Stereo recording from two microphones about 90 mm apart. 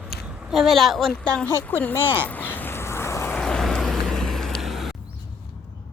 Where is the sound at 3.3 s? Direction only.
5° left (ahead or behind).